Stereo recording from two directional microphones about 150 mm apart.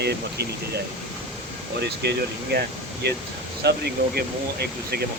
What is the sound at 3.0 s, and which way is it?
Speech, 90° right.